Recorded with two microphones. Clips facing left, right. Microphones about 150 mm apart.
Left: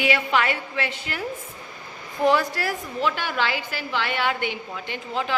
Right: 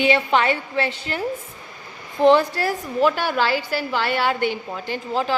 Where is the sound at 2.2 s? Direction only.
30° right (ahead or behind).